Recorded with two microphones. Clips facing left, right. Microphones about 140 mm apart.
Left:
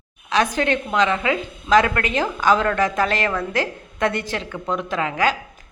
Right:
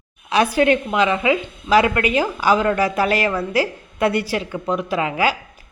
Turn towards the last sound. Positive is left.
turn(degrees=-10)  # may be behind; listen again after turning